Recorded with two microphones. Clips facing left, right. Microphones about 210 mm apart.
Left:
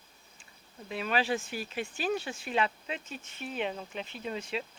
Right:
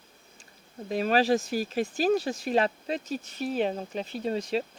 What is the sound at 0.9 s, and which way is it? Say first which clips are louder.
Speech: right 7 dB; 40° right (ahead or behind).